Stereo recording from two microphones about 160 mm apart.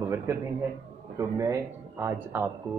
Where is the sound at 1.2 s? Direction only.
20° right (ahead or behind).